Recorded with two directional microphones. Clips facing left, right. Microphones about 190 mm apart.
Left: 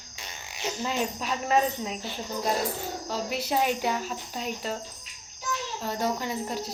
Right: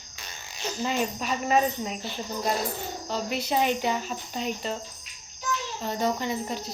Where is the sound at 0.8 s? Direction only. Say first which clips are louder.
Right 2 dB; centre (ahead or behind).